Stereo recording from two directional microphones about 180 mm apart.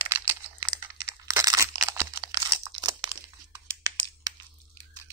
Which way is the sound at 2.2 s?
25° right (ahead or behind).